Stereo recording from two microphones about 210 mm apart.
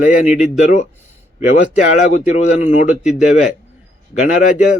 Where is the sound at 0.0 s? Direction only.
40° left (ahead or behind).